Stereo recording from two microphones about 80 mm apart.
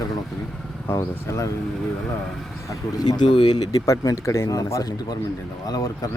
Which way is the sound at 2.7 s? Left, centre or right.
Left.